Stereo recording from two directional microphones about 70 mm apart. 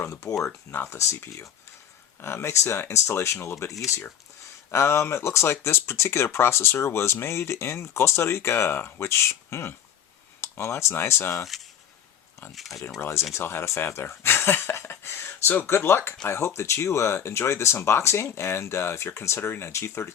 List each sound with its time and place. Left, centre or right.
0.4 s speech: left
13.0 s speech: left